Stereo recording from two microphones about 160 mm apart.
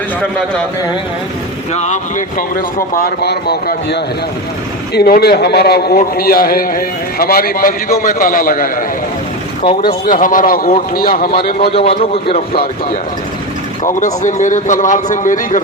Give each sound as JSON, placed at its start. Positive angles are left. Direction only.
{"t": 0.2, "sound": "a man's voice", "side_deg": 5}
{"t": 1.7, "sound": "a man's voice", "side_deg": 45}
{"t": 6.1, "sound": "a man's voice", "side_deg": 65}
{"t": 9.8, "sound": "a man's voice", "side_deg": 60}
{"t": 11.7, "sound": "a man's voice", "side_deg": 35}
{"t": 11.9, "sound": "speech", "side_deg": 70}
{"t": 13.8, "sound": "a man's voice", "side_deg": 50}